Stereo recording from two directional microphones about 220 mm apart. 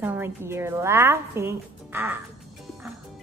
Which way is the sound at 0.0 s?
10° right (ahead or behind).